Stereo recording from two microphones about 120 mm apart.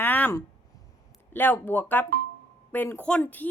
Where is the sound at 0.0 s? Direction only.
15° left (ahead or behind).